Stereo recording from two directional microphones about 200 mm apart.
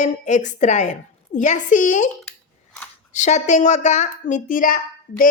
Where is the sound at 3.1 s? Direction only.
35° left (ahead or behind).